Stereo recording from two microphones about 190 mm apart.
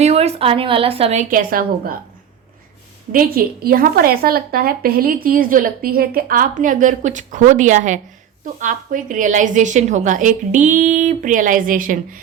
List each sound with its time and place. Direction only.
0.0 s a woman's voice: 35° right (ahead or behind); by 2.0 s 50° right (ahead or behind)
3.1 s a woman's voice: 50° right (ahead or behind)